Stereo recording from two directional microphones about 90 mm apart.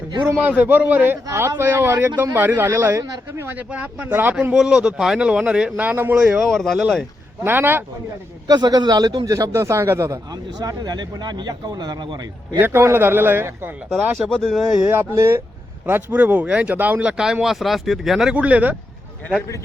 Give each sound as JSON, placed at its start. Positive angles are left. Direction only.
{"t": 0.3, "sound": "a man's voice", "side_deg": -25}
{"t": 3.7, "sound": "a man's voice", "side_deg": -15}
{"t": 4.5, "sound": "speech", "side_deg": -5}
{"t": 6.4, "sound": "speech", "side_deg": 5}
{"t": 7.4, "sound": "a man's voice", "side_deg": -25}
{"t": 8.4, "sound": "a man's voice", "side_deg": -50}
{"t": 10.6, "sound": "speech", "side_deg": -45}
{"t": 12.5, "sound": "a man's voice", "side_deg": -25}
{"t": 14.3, "sound": "speech", "side_deg": 10}
{"t": 14.8, "sound": "a man's voice", "side_deg": -25}
{"t": 18.3, "sound": "speech", "side_deg": -15}